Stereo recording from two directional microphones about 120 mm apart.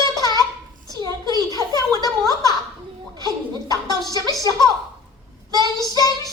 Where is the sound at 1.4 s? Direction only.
30° left (ahead or behind).